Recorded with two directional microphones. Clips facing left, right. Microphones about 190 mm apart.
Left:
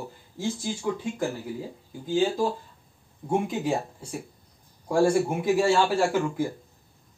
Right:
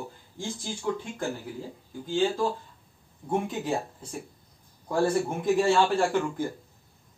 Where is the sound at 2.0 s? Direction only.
10° left (ahead or behind).